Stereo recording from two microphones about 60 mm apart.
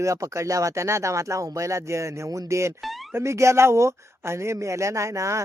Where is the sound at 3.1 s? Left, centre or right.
Right.